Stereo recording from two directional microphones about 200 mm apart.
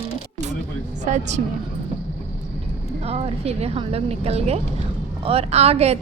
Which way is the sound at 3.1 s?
30° right (ahead or behind).